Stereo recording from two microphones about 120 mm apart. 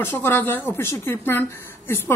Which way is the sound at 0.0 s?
20° left (ahead or behind).